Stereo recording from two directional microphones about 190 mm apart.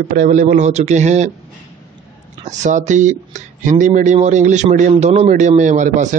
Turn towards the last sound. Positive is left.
turn(degrees=-40)  # may be behind; listen again after turning